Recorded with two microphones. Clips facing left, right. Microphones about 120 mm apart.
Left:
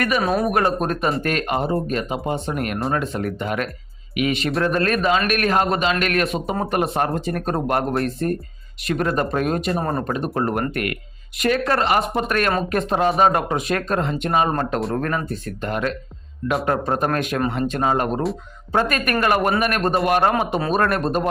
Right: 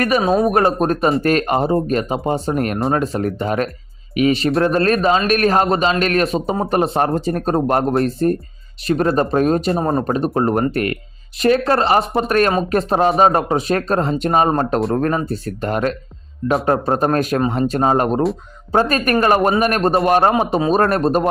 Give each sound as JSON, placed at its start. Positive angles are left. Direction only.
{"t": 0.2, "sound": "speech", "side_deg": -25}